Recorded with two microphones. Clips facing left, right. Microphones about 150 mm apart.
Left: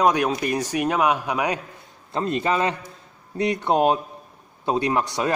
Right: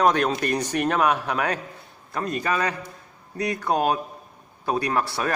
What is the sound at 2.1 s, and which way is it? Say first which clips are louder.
A man's voice: left 3 dB; 25° left (ahead or behind).